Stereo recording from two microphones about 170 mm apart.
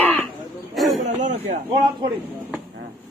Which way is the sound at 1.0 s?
45° right (ahead or behind).